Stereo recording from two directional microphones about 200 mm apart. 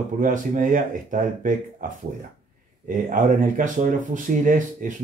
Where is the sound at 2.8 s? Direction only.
40° right (ahead or behind).